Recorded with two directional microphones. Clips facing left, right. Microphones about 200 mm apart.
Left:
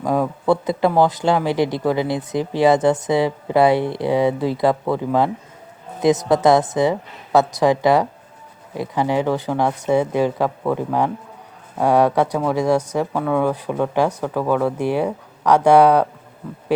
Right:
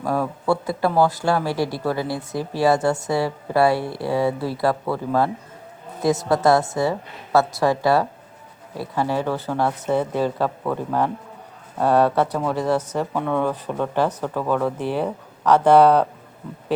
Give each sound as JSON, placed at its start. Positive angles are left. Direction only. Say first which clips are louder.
{"t": 0.0, "sound": "speech", "louder": "left 3 dB", "side_deg": 20}